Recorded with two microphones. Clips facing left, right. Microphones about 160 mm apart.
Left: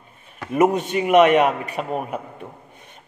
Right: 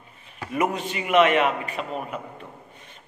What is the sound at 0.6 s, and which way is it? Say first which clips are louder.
A man's voice: left 7 dB; 45° left (ahead or behind).